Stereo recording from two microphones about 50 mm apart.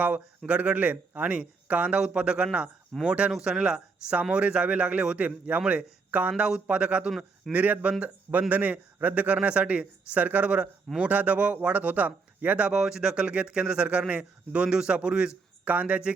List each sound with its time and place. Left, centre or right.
0.0 s a man's voice: right
2.0 s a man's voice: right
12.7 s speech: centre
13.2 s speech: right
15.6 s a man's voice: right